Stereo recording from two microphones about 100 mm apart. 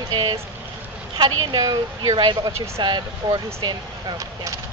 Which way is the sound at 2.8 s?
50° right (ahead or behind).